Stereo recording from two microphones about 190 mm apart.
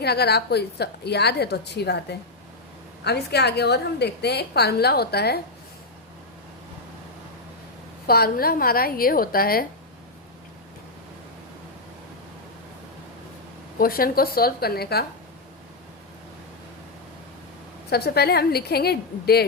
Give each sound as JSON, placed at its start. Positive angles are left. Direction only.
{"t": 0.0, "sound": "a woman's voice", "side_deg": 60}
{"t": 8.0, "sound": "a woman's voice", "side_deg": 55}
{"t": 13.7, "sound": "a woman's voice", "side_deg": 50}
{"t": 17.9, "sound": "a woman's voice", "side_deg": 55}